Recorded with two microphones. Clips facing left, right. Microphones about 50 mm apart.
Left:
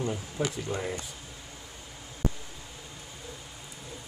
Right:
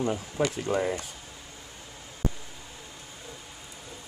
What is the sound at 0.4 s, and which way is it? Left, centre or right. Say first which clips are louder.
Speech: right 4 dB; right.